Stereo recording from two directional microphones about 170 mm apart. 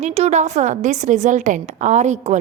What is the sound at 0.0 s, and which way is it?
A woman's voice, 40° right (ahead or behind).